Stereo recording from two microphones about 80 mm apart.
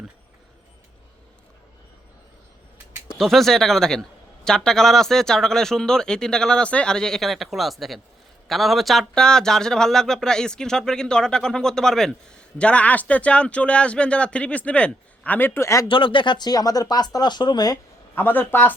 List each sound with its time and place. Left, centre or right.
3.2 s a man's voice: centre; by 15.9 s left
15.9 s speech: left
18.1 s speech: left